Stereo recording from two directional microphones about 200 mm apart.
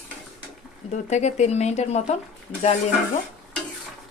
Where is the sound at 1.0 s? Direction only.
35° left (ahead or behind).